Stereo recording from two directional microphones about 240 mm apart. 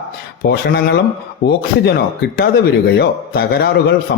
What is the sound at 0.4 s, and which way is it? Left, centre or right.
A man's voice, left.